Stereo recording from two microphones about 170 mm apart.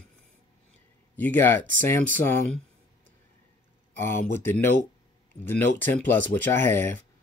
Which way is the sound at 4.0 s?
15° left (ahead or behind).